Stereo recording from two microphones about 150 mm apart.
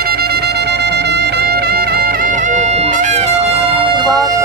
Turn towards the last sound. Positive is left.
turn(degrees=-30)  # may be behind; listen again after turning